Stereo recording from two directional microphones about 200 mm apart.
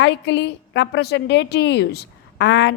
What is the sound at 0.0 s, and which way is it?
A woman's voice, 60° left (ahead or behind).